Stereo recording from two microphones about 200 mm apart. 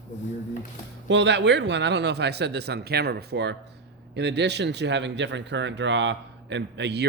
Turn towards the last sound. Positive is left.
turn(degrees=-55)  # may be behind; listen again after turning